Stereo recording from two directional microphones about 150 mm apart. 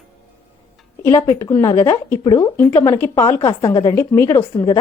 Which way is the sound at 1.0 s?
20° left (ahead or behind).